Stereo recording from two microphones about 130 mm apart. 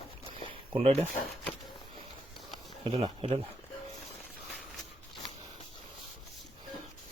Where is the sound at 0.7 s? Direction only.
50° right (ahead or behind).